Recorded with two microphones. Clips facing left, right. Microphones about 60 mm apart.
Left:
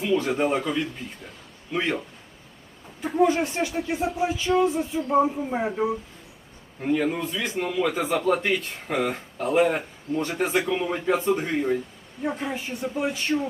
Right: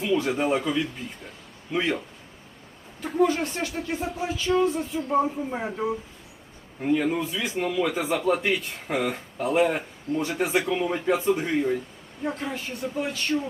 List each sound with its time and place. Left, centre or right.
0.0 s a man's voice: centre
3.0 s a man's voice: centre
12.2 s speech: centre